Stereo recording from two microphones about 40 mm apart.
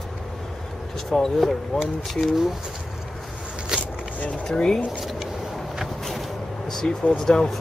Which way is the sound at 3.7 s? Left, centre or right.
Centre.